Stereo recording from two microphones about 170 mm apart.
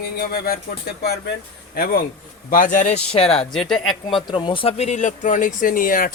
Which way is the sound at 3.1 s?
35° left (ahead or behind).